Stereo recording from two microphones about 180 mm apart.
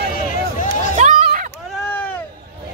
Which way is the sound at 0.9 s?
40° right (ahead or behind).